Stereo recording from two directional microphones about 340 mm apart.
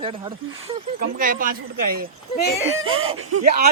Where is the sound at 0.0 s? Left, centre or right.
Centre.